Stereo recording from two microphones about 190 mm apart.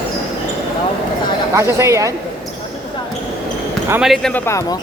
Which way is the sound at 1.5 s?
15° right (ahead or behind).